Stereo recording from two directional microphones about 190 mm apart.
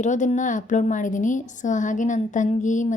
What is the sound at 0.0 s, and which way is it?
A woman's voice, 40° left (ahead or behind).